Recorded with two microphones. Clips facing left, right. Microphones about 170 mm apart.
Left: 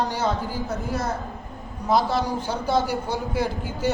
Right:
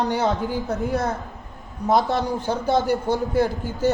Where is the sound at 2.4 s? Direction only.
20° right (ahead or behind).